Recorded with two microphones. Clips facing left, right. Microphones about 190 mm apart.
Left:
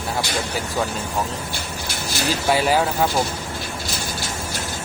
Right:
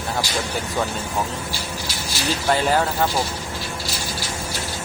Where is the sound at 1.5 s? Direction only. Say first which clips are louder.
Even; 55° left (ahead or behind).